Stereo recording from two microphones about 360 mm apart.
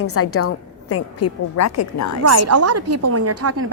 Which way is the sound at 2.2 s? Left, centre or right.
Right.